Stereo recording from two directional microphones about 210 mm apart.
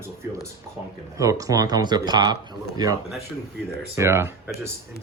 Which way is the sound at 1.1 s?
15° right (ahead or behind).